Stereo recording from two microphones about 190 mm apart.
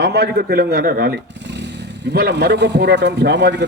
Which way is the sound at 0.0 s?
55° right (ahead or behind).